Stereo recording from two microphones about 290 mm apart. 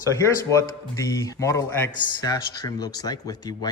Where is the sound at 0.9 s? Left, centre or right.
Centre.